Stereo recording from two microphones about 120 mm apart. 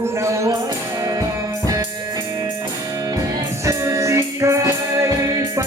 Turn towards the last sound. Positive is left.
turn(degrees=-25)  # may be behind; listen again after turning